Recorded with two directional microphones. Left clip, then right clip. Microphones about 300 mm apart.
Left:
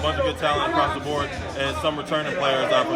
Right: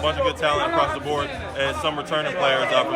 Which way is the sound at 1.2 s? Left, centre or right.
Centre.